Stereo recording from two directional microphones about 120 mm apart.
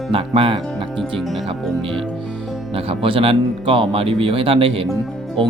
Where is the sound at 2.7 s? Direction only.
55° right (ahead or behind).